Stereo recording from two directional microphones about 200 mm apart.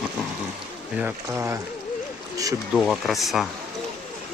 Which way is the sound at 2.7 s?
Centre (ahead or behind).